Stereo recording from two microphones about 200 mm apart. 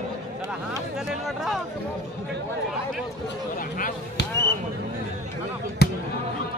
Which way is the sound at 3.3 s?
45° left (ahead or behind).